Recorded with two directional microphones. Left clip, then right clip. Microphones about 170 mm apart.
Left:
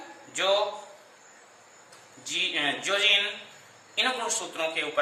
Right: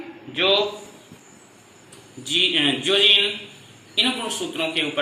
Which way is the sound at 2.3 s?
10° right (ahead or behind).